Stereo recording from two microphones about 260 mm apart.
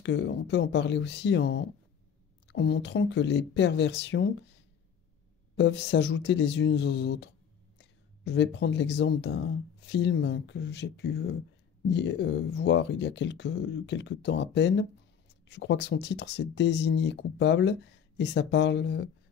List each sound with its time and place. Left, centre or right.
0.0 s speech: left
5.6 s speech: left